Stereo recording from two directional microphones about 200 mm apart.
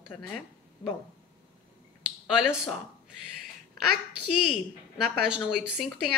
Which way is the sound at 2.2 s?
5° right (ahead or behind).